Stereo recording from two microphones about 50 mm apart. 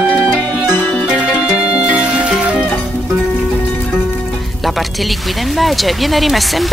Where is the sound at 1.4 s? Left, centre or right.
Right.